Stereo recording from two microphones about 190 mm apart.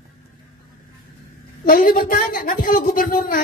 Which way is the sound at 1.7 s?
50° left (ahead or behind).